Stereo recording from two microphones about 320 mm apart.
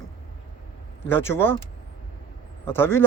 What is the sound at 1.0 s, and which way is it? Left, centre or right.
Speech, centre.